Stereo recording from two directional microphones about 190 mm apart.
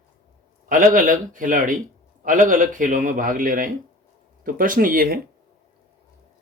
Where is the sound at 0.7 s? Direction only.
45° right (ahead or behind).